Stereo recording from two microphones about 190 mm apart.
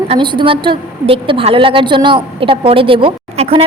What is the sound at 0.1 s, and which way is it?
A woman's voice, 25° right (ahead or behind).